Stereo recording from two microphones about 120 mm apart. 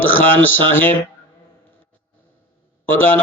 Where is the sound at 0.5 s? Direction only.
15° left (ahead or behind).